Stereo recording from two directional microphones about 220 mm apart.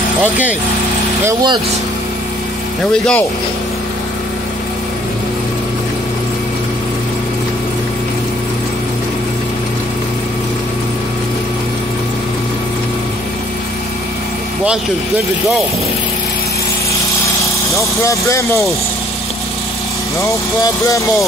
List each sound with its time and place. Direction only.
0.2 s speech: 5° right (ahead or behind)
1.2 s speech: 20° right (ahead or behind)
2.8 s speech: 5° left (ahead or behind)
17.7 s speech: 15° left (ahead or behind)
20.6 s speech: 15° left (ahead or behind)